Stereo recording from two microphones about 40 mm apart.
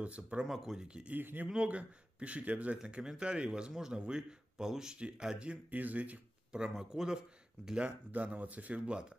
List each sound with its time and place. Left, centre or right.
0.0 s speech: right
0.5 s speech: centre
0.7 s speech: right
1.1 s speech: right
1.5 s speech: right
2.9 s speech: right
4.6 s speech: centre
5.7 s speech: right
6.5 s speech: centre
8.1 s speech: right